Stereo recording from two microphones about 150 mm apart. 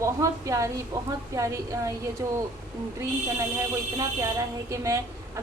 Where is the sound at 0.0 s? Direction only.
20° right (ahead or behind).